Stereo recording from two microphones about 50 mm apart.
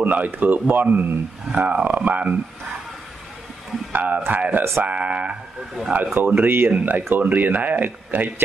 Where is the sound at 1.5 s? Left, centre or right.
Right.